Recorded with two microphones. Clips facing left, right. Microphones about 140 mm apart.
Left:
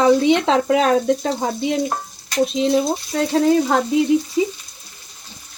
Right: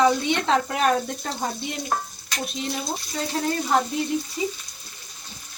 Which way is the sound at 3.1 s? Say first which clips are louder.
Left 11 dB; 90° left.